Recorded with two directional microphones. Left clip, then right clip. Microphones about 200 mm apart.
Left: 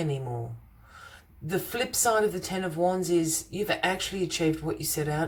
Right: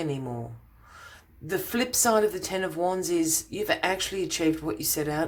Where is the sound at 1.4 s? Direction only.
30° right (ahead or behind).